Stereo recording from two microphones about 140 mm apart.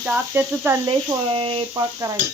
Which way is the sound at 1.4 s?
40° right (ahead or behind).